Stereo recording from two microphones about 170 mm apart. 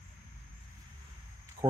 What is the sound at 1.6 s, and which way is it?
Speech, 25° right (ahead or behind).